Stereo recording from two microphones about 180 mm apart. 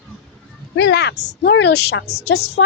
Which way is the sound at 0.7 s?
70° left (ahead or behind).